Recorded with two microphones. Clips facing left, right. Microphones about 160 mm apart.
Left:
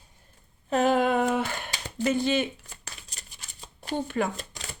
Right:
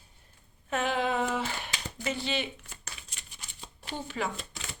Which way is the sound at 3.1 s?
35° left (ahead or behind).